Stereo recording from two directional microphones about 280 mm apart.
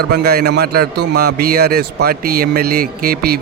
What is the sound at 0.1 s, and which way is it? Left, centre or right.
A man's voice, right.